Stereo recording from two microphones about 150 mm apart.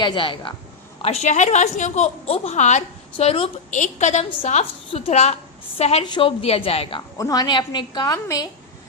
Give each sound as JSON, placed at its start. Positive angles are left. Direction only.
{"t": 0.0, "sound": "a woman's voice", "side_deg": 30}
{"t": 1.0, "sound": "a woman's voice", "side_deg": 50}
{"t": 3.7, "sound": "a woman's voice", "side_deg": 50}
{"t": 7.2, "sound": "a woman's voice", "side_deg": 25}